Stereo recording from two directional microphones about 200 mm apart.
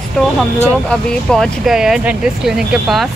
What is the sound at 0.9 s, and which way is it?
A woman's voice, 5° left (ahead or behind).